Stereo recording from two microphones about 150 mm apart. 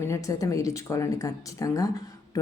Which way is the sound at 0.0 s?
20° left (ahead or behind).